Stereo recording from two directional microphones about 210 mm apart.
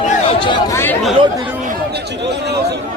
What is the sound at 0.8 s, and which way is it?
Chatter, 10° left (ahead or behind).